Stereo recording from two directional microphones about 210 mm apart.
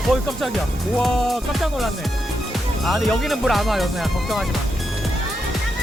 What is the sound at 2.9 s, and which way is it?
Music, centre (ahead or behind).